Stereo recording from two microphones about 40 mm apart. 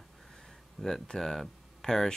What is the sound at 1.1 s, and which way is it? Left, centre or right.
Speech, centre.